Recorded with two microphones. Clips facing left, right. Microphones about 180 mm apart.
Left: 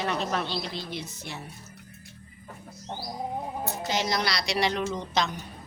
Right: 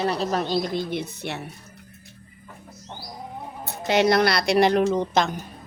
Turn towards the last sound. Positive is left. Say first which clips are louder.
# right 7 dB
turn(degrees=-50)  # may be behind; listen again after turning